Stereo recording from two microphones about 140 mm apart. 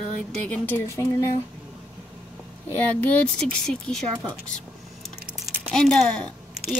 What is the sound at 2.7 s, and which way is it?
A woman's voice, 10° left (ahead or behind).